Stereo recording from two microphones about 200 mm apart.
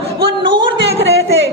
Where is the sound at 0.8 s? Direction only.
60° right (ahead or behind).